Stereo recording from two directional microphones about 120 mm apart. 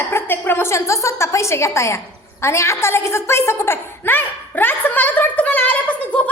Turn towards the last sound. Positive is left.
turn(degrees=10)  # may be behind; listen again after turning